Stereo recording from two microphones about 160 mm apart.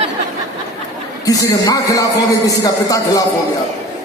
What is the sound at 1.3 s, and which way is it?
Speech, 20° left (ahead or behind).